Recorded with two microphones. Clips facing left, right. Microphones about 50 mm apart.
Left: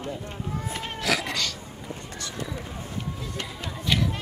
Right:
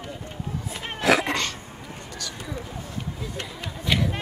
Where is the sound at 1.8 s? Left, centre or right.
Left.